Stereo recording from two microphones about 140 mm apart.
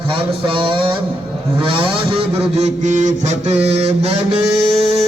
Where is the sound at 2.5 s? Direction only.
55° right (ahead or behind).